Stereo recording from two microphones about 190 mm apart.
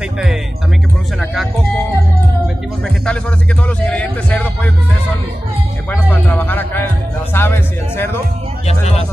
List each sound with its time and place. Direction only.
3.1 s a man's voice: 5° left (ahead or behind)
5.9 s music: 10° left (ahead or behind)
7.3 s speech: 10° left (ahead or behind)
8.6 s speech: 35° left (ahead or behind)